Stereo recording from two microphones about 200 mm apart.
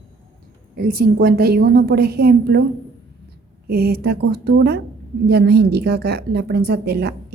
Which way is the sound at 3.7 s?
50° right (ahead or behind).